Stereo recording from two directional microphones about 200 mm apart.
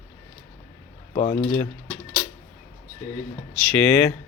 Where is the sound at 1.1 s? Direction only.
40° left (ahead or behind).